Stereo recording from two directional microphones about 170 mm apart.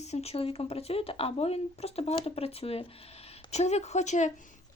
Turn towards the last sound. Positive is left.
turn(degrees=45)  # may be behind; listen again after turning